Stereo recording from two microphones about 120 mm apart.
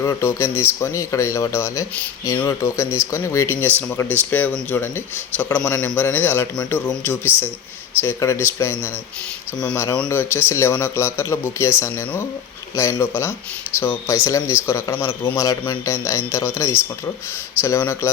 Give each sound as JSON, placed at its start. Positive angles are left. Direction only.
{"t": 0.0, "sound": "a man's voice", "side_deg": 25}
{"t": 10.1, "sound": "a man's voice", "side_deg": 20}